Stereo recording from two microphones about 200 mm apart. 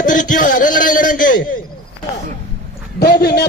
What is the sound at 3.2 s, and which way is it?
Speech, 50° left (ahead or behind).